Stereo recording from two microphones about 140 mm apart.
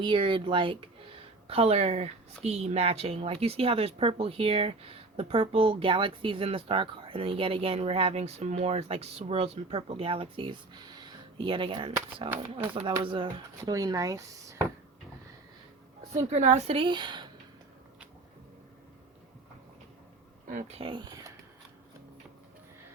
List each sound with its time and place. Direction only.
0.0 s a woman's voice: 35° right (ahead or behind)
13.0 s speech: 35° right (ahead or behind)
16.1 s a woman's voice: 55° right (ahead or behind); by 17.2 s 30° right (ahead or behind)
20.5 s speech: 65° right (ahead or behind)
20.7 s speech: 35° right (ahead or behind)